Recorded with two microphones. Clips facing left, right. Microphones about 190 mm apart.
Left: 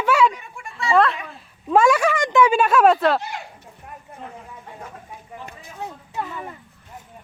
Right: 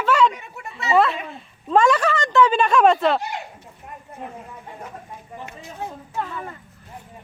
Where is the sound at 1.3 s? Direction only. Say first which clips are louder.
Left 1 dB; 10° left (ahead or behind).